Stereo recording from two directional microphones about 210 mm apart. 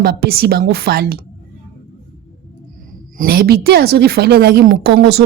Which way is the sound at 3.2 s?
45° right (ahead or behind).